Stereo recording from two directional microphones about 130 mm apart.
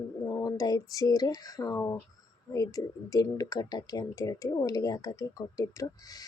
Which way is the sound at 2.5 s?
25° left (ahead or behind).